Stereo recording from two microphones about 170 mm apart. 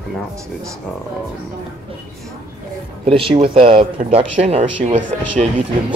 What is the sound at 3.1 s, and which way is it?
Speech, 35° right (ahead or behind).